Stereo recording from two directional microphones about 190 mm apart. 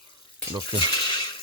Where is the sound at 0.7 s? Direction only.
25° left (ahead or behind).